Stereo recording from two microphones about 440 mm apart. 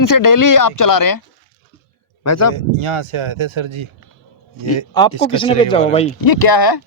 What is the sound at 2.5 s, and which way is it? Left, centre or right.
Speech, right.